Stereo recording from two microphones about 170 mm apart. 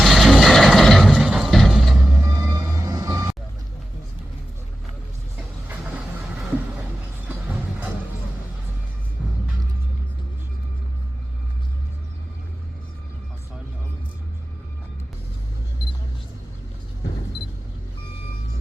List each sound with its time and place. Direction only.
0.0 s music: centre (ahead or behind)
2.2 s music: 20° right (ahead or behind)
5.4 s vehicle: 5° right (ahead or behind)
7.4 s a sound: 10° right (ahead or behind)